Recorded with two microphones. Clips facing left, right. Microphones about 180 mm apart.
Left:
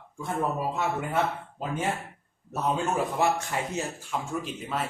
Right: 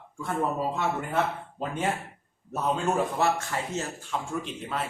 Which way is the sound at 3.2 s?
15° left (ahead or behind).